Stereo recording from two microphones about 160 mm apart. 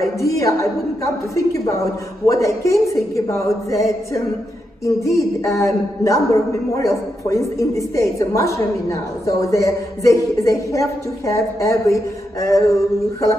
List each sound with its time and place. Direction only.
0.0 s a man's voice: 20° left (ahead or behind)